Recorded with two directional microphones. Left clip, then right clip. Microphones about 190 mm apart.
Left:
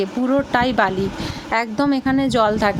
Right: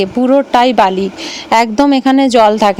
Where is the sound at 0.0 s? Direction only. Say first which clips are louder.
Right 9 dB; 30° right (ahead or behind).